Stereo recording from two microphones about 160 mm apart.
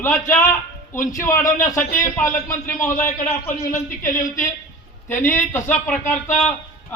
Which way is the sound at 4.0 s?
55° left (ahead or behind).